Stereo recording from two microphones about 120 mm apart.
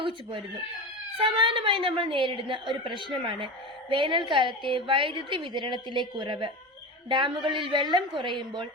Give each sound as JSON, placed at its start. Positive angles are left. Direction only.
{"t": 0.0, "sound": "a woman's voice", "side_deg": -45}